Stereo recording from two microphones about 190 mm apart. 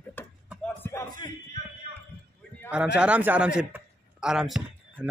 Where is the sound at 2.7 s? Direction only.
5° right (ahead or behind).